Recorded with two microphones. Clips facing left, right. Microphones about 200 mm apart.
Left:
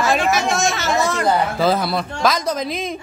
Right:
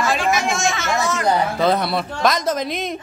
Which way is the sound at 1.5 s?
Centre (ahead or behind).